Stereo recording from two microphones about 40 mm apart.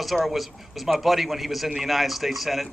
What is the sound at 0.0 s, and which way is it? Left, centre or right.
A man's voice, centre.